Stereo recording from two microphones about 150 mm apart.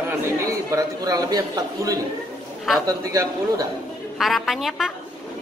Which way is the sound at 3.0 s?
20° right (ahead or behind).